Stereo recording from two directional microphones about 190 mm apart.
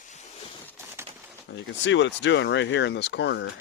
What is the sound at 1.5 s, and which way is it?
Speech, 70° left (ahead or behind).